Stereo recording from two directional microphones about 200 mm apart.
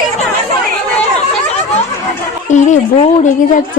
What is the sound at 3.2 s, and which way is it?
Speech, 40° left (ahead or behind).